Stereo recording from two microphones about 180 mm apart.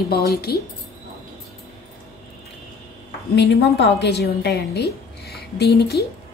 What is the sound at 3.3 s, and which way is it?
A woman's voice, 65° left (ahead or behind).